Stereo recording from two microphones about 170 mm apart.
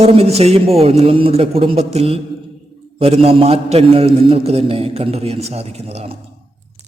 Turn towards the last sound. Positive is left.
turn(degrees=-35)  # may be behind; listen again after turning